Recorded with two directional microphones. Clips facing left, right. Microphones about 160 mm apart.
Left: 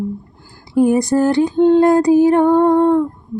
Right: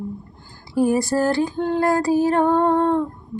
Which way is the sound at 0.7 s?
20° left (ahead or behind).